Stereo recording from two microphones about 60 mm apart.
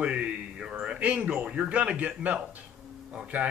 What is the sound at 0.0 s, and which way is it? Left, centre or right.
Speech, centre.